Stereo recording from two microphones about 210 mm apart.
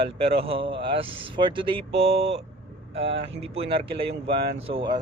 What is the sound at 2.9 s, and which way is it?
Speech, 55° right (ahead or behind).